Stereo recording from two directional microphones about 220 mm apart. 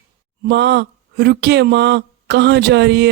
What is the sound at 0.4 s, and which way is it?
Speech, 50° right (ahead or behind).